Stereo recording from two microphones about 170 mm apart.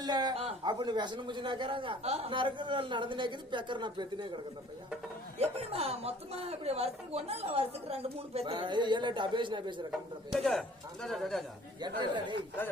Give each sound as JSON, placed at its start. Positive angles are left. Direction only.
{"t": 0.0, "sound": "a man's voice", "side_deg": -25}
{"t": 5.4, "sound": "a woman's voice", "side_deg": -35}
{"t": 10.3, "sound": "speech", "side_deg": 0}
{"t": 11.8, "sound": "a man's voice", "side_deg": -25}